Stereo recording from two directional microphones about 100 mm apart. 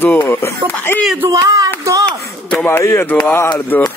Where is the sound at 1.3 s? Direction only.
35° right (ahead or behind).